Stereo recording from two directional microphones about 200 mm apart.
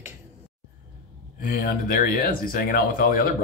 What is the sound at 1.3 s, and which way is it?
Speech, 45° left (ahead or behind).